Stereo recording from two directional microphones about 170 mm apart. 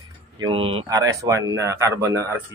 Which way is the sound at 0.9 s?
20° right (ahead or behind).